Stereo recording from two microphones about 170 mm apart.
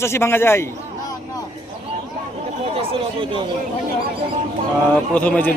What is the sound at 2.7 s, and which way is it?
Speech, 35° right (ahead or behind).